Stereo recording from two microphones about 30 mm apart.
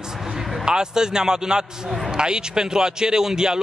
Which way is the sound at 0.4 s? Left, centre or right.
Centre.